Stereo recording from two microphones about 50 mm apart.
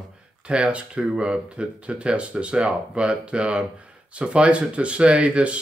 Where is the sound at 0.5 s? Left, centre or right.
Right.